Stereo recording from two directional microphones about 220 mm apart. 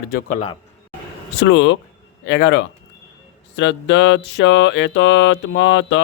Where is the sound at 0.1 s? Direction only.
40° left (ahead or behind).